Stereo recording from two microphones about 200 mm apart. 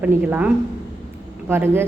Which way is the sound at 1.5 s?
10° right (ahead or behind).